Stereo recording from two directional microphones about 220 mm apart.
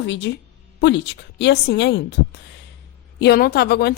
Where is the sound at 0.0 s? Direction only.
55° left (ahead or behind).